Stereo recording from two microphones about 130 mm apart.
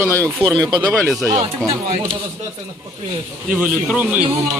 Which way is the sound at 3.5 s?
5° right (ahead or behind).